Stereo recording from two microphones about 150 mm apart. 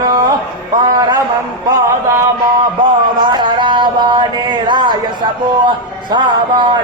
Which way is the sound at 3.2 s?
30° right (ahead or behind).